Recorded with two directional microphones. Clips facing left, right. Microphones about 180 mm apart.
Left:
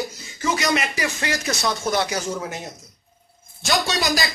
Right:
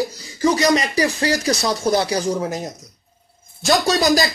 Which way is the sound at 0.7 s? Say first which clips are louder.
Right 6 dB; 35° right (ahead or behind).